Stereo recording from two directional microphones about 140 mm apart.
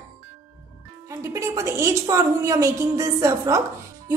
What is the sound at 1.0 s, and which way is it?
A woman's voice, 20° right (ahead or behind).